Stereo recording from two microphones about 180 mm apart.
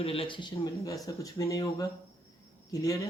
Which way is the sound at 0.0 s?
30° left (ahead or behind).